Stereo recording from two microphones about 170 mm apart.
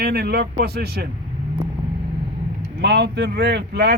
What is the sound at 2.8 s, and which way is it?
Speech, 75° right (ahead or behind).